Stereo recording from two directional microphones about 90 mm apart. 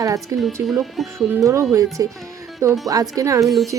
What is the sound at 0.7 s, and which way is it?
Speech, 5° right (ahead or behind).